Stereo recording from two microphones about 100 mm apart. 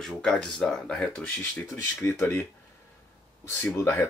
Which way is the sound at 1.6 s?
30° left (ahead or behind).